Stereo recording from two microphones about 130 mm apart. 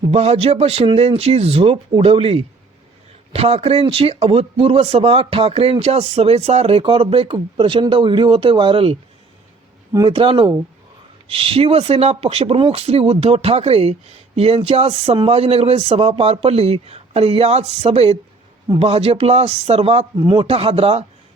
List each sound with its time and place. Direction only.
0.1 s speech: 50° right (ahead or behind)
10.1 s speech: 45° right (ahead or behind)